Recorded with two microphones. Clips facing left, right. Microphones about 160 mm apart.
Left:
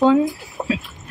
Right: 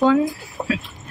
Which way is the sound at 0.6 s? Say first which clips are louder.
Left 1 dB; 5° left (ahead or behind).